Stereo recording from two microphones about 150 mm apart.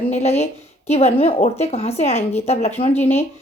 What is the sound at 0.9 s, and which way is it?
A woman's voice, 45° left (ahead or behind).